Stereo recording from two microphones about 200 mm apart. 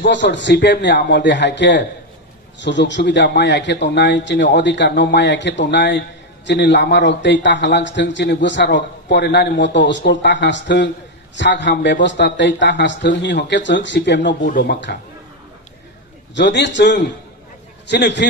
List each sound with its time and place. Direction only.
0.0 s a man's voice: 60° left (ahead or behind)
16.3 s a man's voice: 60° left (ahead or behind)